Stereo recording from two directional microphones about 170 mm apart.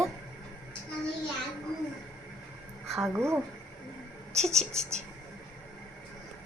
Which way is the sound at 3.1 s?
15° right (ahead or behind).